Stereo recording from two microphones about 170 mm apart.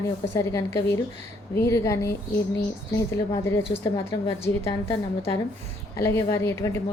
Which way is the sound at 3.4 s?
15° left (ahead or behind).